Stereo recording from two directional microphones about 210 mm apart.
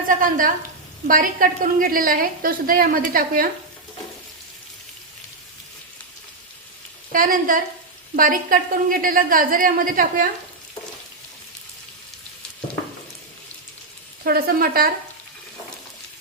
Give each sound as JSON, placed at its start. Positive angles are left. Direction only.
{"t": 0.1, "sound": "a woman's voice", "side_deg": -40}
{"t": 7.1, "sound": "a woman's voice", "side_deg": -40}
{"t": 14.3, "sound": "a woman's voice", "side_deg": -45}